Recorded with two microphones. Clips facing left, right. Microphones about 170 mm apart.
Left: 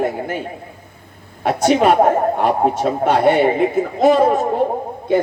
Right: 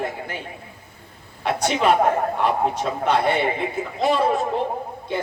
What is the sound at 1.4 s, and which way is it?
A man's voice, 45° left (ahead or behind).